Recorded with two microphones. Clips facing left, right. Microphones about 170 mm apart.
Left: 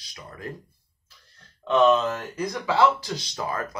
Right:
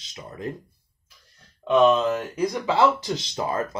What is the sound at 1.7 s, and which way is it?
Speech, 10° right (ahead or behind).